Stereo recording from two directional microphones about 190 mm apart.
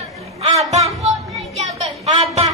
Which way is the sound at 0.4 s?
35° right (ahead or behind).